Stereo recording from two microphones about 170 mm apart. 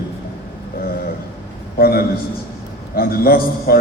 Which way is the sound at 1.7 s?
65° left (ahead or behind).